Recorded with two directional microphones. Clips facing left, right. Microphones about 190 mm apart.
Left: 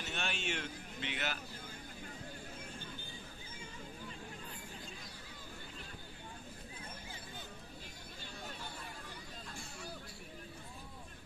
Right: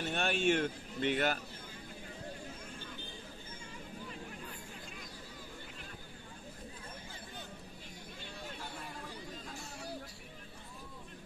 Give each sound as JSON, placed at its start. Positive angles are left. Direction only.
{"t": 0.0, "sound": "a man's voice", "side_deg": -50}